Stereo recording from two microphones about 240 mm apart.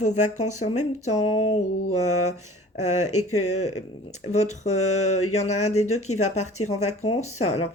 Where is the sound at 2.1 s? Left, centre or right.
Left.